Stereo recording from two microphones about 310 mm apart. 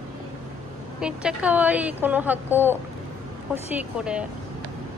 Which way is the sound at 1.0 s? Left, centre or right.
Centre.